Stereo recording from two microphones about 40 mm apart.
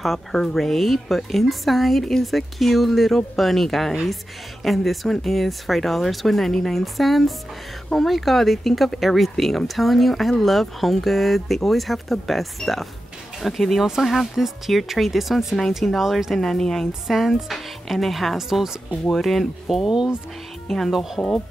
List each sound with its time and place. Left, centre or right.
0.0 s speech: centre
19.9 s speech: centre
20.6 s speech: centre
20.9 s speech: centre